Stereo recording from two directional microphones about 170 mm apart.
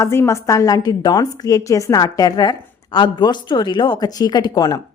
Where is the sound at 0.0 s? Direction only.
15° left (ahead or behind).